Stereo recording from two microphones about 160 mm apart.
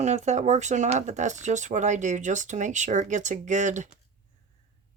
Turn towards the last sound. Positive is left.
turn(degrees=-50)  # may be behind; listen again after turning